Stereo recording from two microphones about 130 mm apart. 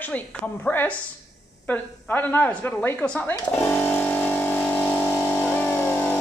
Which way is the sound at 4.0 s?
15° left (ahead or behind).